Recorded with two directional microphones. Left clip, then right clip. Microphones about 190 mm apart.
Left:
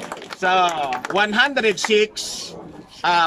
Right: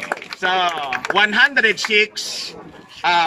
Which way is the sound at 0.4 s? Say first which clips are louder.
Left 2 dB; 15° left (ahead or behind).